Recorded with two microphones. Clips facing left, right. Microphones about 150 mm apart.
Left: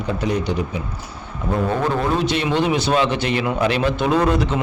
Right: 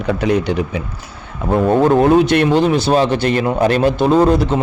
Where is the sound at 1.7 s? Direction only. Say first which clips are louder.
Right 12 dB; 45° right (ahead or behind).